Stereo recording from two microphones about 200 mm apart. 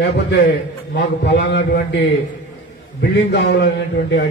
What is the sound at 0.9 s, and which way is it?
A man's voice, 60° left (ahead or behind).